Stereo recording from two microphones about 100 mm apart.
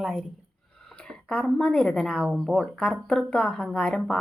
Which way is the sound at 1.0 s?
10° left (ahead or behind).